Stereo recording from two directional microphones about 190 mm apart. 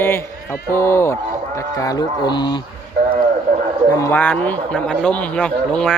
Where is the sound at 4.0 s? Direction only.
10° left (ahead or behind).